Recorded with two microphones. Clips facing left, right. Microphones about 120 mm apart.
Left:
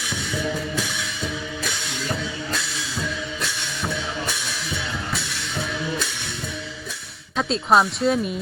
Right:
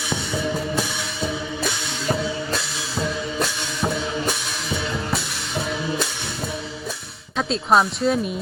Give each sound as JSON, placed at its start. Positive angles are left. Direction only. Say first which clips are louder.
{"t": 3.0, "sound": "music", "louder": "right 6 dB", "side_deg": -40}
{"t": 7.3, "sound": "speech", "louder": "even", "side_deg": 0}